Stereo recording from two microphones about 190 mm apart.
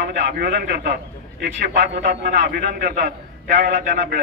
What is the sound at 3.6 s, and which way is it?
Speech, 45° right (ahead or behind).